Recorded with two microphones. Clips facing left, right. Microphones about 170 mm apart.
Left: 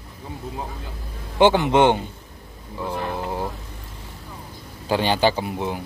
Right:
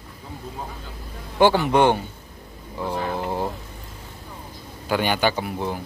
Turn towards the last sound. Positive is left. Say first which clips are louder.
# left 1 dB
turn(degrees=15)  # may be behind; listen again after turning